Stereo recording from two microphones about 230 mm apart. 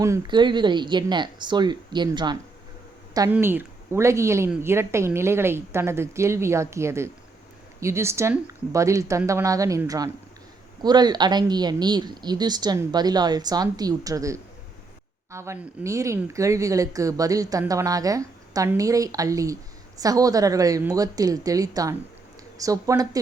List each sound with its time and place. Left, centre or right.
0.0 s speech: centre